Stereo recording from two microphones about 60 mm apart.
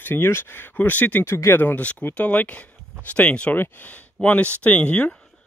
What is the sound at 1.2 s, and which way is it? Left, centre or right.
Speech, left.